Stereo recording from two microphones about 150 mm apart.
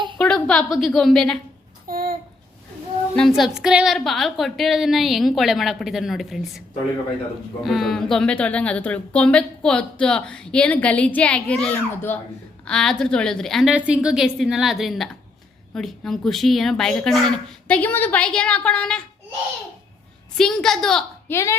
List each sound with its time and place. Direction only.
0.2 s a woman's voice: 5° left (ahead or behind)
1.9 s a sound: 80° right
3.2 s a woman's voice: centre (ahead or behind)
7.6 s a woman's voice: centre (ahead or behind)
20.3 s a woman's voice: 5° left (ahead or behind)
21.2 s speech: 20° left (ahead or behind)